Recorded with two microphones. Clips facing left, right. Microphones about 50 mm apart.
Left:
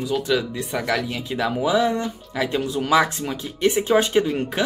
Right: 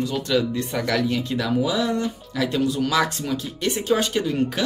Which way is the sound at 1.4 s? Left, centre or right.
Left.